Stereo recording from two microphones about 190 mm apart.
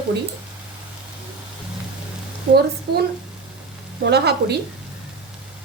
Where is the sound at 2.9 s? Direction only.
60° right (ahead or behind).